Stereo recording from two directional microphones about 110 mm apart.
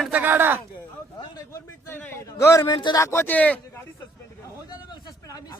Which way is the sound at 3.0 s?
25° left (ahead or behind).